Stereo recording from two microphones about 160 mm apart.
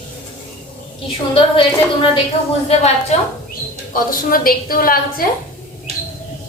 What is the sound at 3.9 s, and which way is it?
A woman's voice, 60° left (ahead or behind).